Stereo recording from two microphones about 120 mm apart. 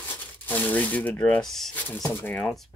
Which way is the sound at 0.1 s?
15° left (ahead or behind).